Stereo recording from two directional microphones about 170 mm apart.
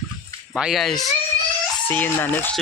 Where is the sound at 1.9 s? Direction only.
10° left (ahead or behind).